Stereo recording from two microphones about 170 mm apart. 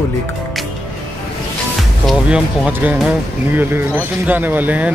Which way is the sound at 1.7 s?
Centre (ahead or behind).